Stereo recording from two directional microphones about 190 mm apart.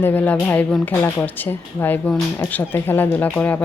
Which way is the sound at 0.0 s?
10° left (ahead or behind).